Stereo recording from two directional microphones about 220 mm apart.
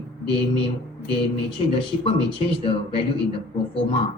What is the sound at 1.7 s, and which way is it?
A man's voice, 25° left (ahead or behind).